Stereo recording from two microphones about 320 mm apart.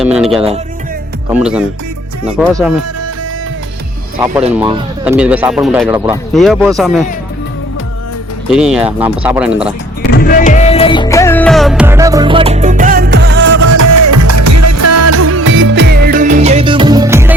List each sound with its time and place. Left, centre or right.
0.0 s music: centre
1.3 s speech: centre
5.0 s speech: centre
8.4 s speech: centre
10.2 s music: left; by 13.6 s right
13.6 s music: right; by 17.3 s centre